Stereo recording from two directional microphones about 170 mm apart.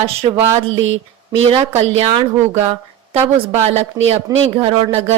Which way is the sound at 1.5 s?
35° right (ahead or behind).